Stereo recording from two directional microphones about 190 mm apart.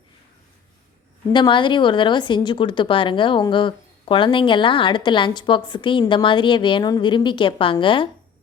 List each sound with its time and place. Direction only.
1.3 s a woman's voice: 25° left (ahead or behind)